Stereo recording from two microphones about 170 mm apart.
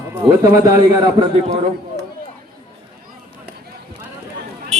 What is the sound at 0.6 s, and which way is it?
Speech, 25° right (ahead or behind).